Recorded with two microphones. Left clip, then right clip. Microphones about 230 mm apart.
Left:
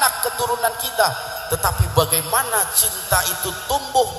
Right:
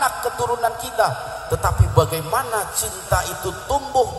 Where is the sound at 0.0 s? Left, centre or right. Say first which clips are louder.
Left 1 dB; right.